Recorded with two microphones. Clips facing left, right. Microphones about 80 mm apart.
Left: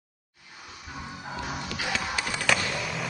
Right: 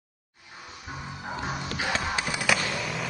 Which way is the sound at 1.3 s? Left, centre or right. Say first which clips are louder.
Right 2 dB; right.